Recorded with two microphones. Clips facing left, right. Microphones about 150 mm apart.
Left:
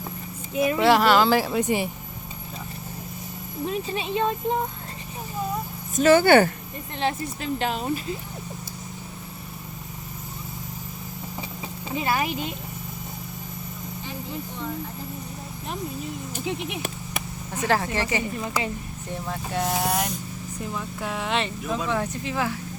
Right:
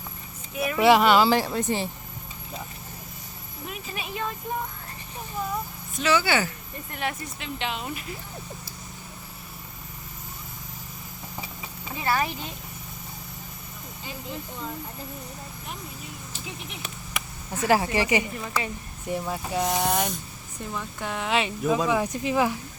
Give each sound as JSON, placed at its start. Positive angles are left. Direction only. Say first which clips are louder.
{"t": 0.5, "sound": "speech", "louder": "left 6 dB", "side_deg": 25}
{"t": 0.8, "sound": "speech", "louder": "right 1 dB", "side_deg": 0}
{"t": 1.4, "sound": "speech", "louder": "left 3 dB", "side_deg": 10}
{"t": 3.7, "sound": "speech", "louder": "left 8 dB", "side_deg": 30}
{"t": 6.0, "sound": "speech", "louder": "left 8 dB", "side_deg": 50}
{"t": 6.9, "sound": "speech", "louder": "left 5 dB", "side_deg": 30}
{"t": 7.6, "sound": "speech", "louder": "left 4 dB", "side_deg": 40}
{"t": 11.9, "sound": "speech", "louder": "left 1 dB", "side_deg": 20}
{"t": 16.3, "sound": "speech", "louder": "left 11 dB", "side_deg": 55}
{"t": 17.7, "sound": "speech", "louder": "right 2 dB", "side_deg": -10}
{"t": 18.4, "sound": "speech", "louder": "left 2 dB", "side_deg": 20}
{"t": 19.1, "sound": "speech", "louder": "right 1 dB", "side_deg": -5}